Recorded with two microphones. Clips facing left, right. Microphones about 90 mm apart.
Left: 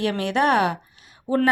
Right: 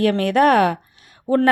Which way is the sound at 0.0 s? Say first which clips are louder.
Right 6 dB; 50° right (ahead or behind).